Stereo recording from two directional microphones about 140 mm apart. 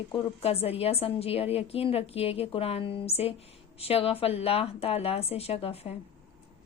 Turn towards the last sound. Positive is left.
turn(degrees=45)  # may be behind; listen again after turning